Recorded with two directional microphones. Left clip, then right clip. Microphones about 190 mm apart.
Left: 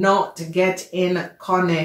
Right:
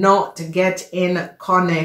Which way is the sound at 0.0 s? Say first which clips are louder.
Right 3 dB; 35° right (ahead or behind).